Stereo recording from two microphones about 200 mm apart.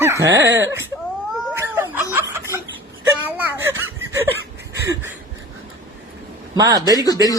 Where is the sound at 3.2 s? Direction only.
10° right (ahead or behind).